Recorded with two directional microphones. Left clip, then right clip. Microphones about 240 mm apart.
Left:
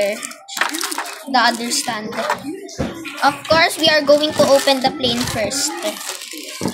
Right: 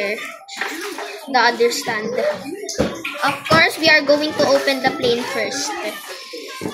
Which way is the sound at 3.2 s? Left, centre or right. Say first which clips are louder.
Left 1 dB; left.